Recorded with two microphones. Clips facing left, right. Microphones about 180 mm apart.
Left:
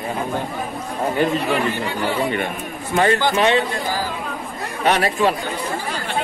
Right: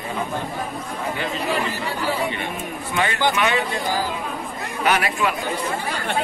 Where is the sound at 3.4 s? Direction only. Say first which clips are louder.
Left 5 dB; 30° left (ahead or behind).